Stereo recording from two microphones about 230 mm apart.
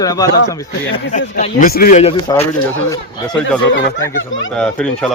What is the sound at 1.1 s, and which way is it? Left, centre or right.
Speech, left.